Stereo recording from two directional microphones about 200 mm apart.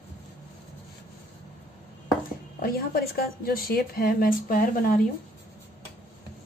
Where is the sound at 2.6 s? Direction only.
50° left (ahead or behind).